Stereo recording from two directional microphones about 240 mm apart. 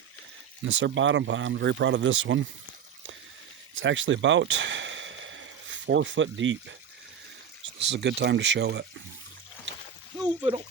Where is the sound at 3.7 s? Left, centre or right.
Right.